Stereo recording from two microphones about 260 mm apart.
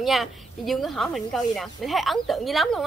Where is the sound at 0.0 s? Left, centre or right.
Centre.